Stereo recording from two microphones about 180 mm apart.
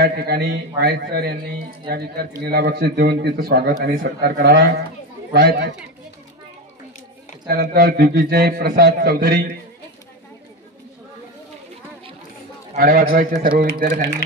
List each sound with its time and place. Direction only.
0.0 s a man's voice: 60° right (ahead or behind)
7.4 s a man's voice: 55° right (ahead or behind)
12.7 s a man's voice: 55° right (ahead or behind)